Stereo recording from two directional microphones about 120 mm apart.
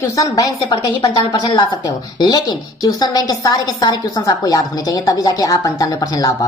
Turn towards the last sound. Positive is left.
turn(degrees=30)  # may be behind; listen again after turning